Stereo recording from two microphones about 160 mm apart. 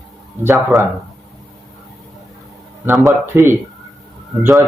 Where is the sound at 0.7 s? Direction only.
Centre (ahead or behind).